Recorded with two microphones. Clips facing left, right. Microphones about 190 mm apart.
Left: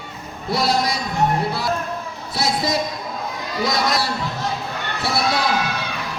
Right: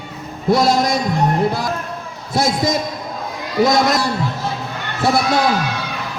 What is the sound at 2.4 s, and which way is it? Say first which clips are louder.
Speech: right 4 dB; 45° right (ahead or behind).